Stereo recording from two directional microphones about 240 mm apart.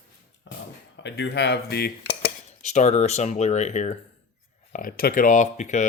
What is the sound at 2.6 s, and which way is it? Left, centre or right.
Speech, left.